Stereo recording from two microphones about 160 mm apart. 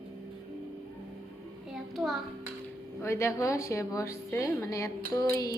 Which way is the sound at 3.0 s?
15° left (ahead or behind).